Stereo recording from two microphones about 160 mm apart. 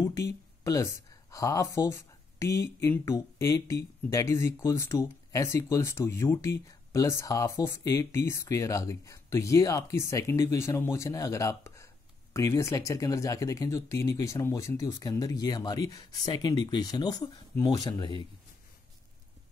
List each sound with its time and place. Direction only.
1.3 s speech: 20° left (ahead or behind)